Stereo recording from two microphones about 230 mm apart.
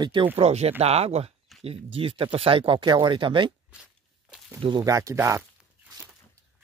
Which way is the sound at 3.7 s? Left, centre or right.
Centre.